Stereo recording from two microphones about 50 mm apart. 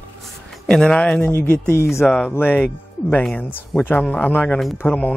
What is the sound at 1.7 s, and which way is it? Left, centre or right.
Speech, left.